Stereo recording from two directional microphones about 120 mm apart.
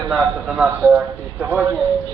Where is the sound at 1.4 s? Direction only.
15° right (ahead or behind).